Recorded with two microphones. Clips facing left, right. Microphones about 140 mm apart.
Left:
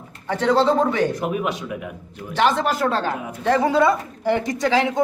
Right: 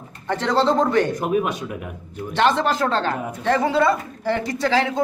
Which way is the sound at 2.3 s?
10° left (ahead or behind).